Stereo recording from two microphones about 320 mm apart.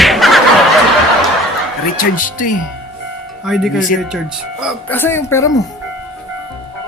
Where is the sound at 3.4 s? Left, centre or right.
Centre.